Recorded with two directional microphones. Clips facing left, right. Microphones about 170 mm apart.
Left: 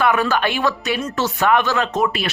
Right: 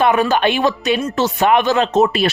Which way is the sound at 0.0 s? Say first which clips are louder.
Right 4 dB; 20° right (ahead or behind).